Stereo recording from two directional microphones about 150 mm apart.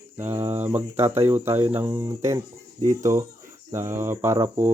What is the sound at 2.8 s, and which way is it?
Speech, 55° right (ahead or behind).